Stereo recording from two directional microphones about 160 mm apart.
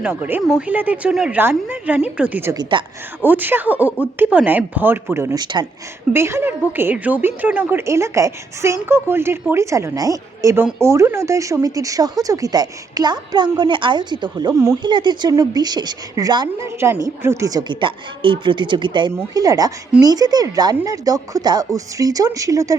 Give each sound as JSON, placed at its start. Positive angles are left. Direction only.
{"t": 0.0, "sound": "a woman's voice", "side_deg": -10}
{"t": 2.6, "sound": "a woman's voice", "side_deg": -30}
{"t": 3.2, "sound": "a woman's voice", "side_deg": -10}
{"t": 6.1, "sound": "a woman's voice", "side_deg": -15}